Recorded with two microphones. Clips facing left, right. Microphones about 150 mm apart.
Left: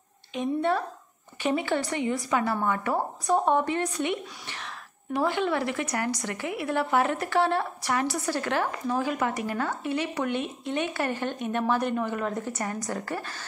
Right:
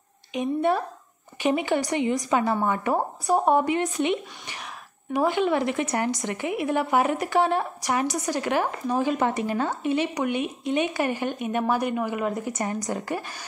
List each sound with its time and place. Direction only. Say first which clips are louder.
0.3 s a woman's voice: right 2 dB; 15° right (ahead or behind)